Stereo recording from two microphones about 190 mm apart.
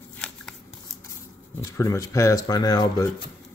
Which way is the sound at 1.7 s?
15° left (ahead or behind).